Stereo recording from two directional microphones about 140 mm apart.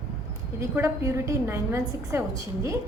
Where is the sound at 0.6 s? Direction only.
20° right (ahead or behind).